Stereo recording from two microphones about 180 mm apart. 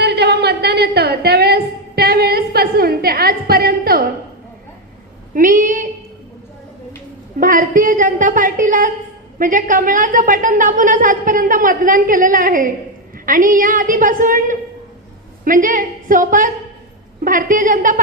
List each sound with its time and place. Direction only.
0.0 s music: 65° right (ahead or behind)
5.3 s a sound: 50° right (ahead or behind)
7.3 s a woman's voice: 50° right (ahead or behind)